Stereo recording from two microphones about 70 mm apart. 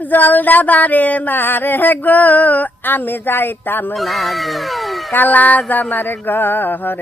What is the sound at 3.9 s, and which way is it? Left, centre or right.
Speech, centre.